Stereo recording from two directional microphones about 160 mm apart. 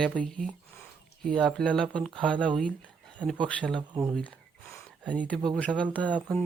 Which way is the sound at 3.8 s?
20° right (ahead or behind).